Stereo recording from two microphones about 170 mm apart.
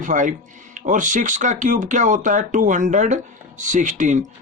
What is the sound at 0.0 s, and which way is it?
Speech, 50° right (ahead or behind).